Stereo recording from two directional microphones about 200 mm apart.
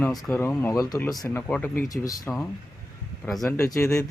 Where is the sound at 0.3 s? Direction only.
10° left (ahead or behind).